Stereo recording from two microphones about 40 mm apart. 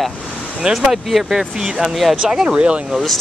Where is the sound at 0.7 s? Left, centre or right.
Centre.